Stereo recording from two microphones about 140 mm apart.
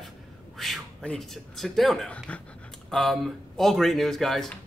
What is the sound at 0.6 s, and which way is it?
Speech, centre (ahead or behind).